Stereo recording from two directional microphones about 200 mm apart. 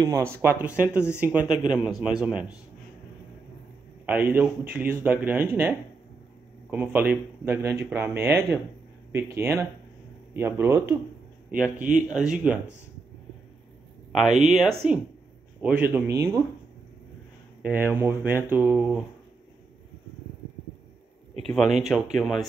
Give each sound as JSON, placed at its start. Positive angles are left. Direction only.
{"t": 0.0, "sound": "speech", "side_deg": -15}
{"t": 1.4, "sound": "a man's voice", "side_deg": 20}
{"t": 2.0, "sound": "speech", "side_deg": -5}
{"t": 4.0, "sound": "speech", "side_deg": -10}
{"t": 14.1, "sound": "speech", "side_deg": 0}
{"t": 17.6, "sound": "speech", "side_deg": -10}
{"t": 21.5, "sound": "speech", "side_deg": 0}